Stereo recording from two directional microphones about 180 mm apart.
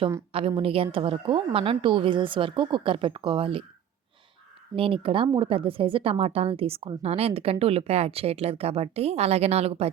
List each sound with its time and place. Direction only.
0.3 s a woman's voice: 30° right (ahead or behind)
4.7 s speech: 30° right (ahead or behind)